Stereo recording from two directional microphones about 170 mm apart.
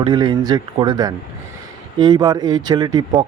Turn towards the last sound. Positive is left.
turn(degrees=-20)  # may be behind; listen again after turning